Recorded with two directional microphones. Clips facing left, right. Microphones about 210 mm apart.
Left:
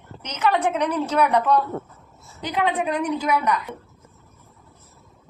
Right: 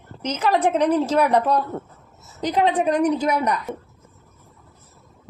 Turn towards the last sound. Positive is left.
turn(degrees=-40)  # may be behind; listen again after turning